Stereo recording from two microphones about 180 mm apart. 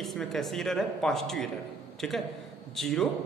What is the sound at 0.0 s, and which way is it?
A man's voice, centre (ahead or behind).